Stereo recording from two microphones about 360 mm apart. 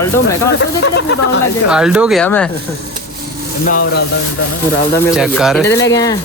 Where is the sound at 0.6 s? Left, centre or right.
Left.